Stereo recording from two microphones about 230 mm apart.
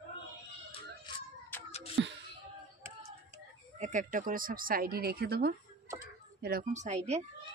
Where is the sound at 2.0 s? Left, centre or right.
Right.